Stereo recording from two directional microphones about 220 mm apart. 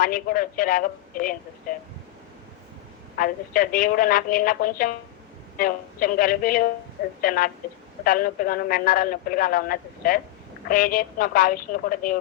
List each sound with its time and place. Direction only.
0.0 s speech: 40° left (ahead or behind)
3.2 s speech: 40° left (ahead or behind)